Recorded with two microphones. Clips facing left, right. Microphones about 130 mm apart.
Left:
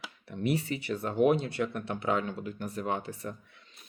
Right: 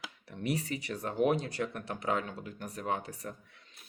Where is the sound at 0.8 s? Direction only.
40° right (ahead or behind).